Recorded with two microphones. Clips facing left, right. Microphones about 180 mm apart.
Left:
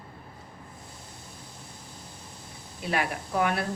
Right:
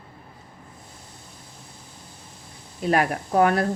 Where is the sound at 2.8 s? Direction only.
45° right (ahead or behind).